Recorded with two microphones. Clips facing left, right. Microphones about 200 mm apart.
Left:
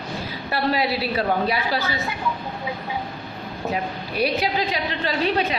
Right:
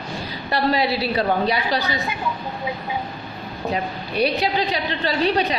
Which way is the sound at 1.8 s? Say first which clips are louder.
Right 2 dB; 15° right (ahead or behind).